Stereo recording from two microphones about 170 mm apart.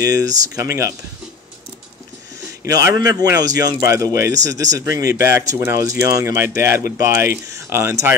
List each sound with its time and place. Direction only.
0.0 s speech: 20° right (ahead or behind)
2.6 s speech: 20° right (ahead or behind)